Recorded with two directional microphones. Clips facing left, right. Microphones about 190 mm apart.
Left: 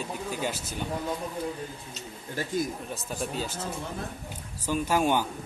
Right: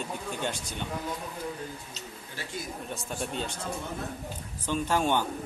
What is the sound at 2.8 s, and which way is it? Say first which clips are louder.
Speech: left 1 dB; centre (ahead or behind).